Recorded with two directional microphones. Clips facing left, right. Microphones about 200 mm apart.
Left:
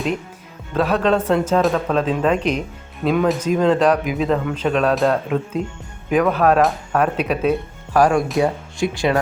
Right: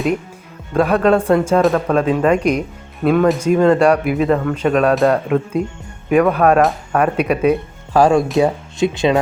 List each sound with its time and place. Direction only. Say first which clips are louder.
0.7 s speech: right 4 dB; 10° right (ahead or behind)
7.9 s speech: right 3 dB; 25° right (ahead or behind)